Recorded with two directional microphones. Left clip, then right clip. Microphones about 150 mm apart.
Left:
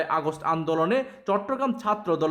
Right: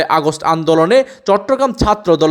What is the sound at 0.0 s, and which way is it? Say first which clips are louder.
A man's voice: right 12 dB; 30° right (ahead or behind).